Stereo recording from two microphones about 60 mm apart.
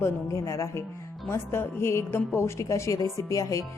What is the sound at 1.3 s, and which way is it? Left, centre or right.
A woman's voice, left.